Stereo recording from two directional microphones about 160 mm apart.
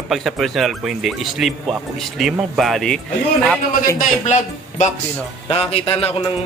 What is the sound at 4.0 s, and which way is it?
A man's voice, 50° left (ahead or behind).